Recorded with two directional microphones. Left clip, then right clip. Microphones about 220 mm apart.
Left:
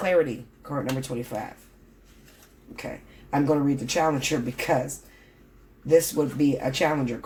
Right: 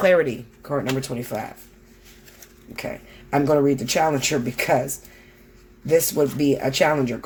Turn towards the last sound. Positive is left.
turn(degrees=-50)  # may be behind; listen again after turning